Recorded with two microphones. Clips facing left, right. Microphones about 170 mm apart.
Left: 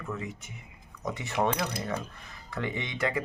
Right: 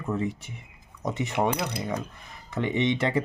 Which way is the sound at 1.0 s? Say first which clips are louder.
Right 3 dB; 20° right (ahead or behind).